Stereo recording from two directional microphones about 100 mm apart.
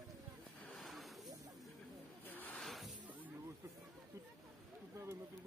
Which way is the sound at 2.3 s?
20° left (ahead or behind).